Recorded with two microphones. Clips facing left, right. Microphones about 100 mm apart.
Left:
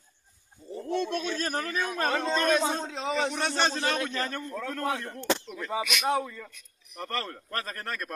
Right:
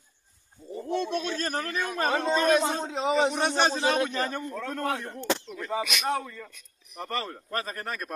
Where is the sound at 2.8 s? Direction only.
15° right (ahead or behind).